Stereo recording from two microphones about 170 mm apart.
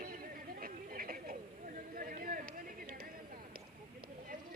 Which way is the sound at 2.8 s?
55° right (ahead or behind).